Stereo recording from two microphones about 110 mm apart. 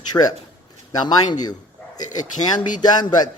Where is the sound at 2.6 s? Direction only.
40° left (ahead or behind).